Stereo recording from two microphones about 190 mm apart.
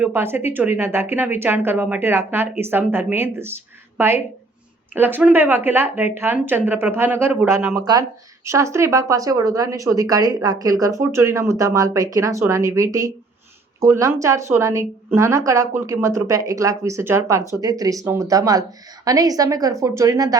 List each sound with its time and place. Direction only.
0.0 s a woman's voice: 10° right (ahead or behind)